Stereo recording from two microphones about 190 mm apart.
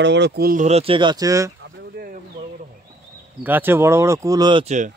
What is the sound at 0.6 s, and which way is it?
Speech, 30° right (ahead or behind).